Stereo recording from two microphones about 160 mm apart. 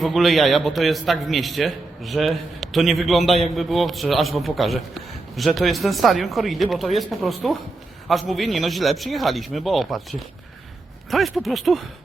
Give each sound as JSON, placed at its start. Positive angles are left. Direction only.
{"t": 0.0, "sound": "a man's voice", "side_deg": 0}